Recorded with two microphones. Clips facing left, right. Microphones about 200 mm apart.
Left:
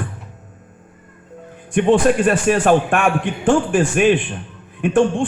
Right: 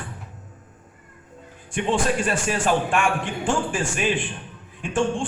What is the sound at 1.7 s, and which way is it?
A man's voice, 55° left (ahead or behind).